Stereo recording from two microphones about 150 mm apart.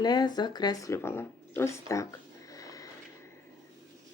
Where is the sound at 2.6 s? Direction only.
25° left (ahead or behind).